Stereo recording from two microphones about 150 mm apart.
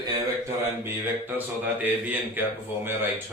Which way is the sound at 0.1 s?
20° right (ahead or behind).